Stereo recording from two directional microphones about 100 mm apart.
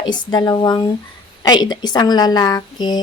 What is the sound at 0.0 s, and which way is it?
A woman's voice, 45° left (ahead or behind).